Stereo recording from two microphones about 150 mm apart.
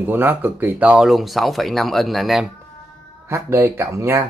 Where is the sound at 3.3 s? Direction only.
15° right (ahead or behind).